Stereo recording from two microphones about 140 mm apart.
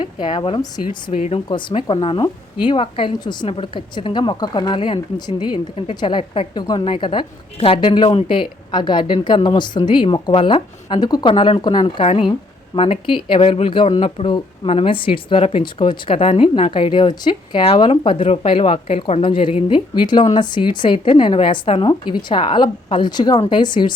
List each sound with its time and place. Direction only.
0.0 s speech: 35° left (ahead or behind)
1.5 s speech: 35° left (ahead or behind)
12.0 s speech: 45° left (ahead or behind)